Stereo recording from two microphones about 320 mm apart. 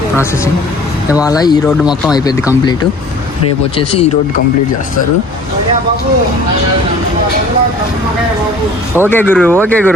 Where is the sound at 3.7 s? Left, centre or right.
Centre.